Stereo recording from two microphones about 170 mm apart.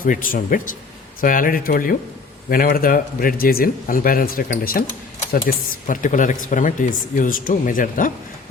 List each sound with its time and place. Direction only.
0.0 s speech: 55° left (ahead or behind)